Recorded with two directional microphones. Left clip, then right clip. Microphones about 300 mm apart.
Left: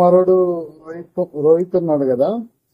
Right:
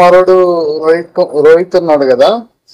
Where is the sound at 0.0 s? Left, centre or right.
Centre.